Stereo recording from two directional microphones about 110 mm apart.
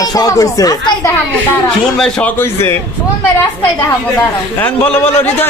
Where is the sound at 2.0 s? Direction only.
5° left (ahead or behind).